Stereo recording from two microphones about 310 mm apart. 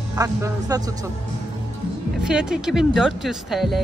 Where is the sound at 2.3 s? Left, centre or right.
Centre.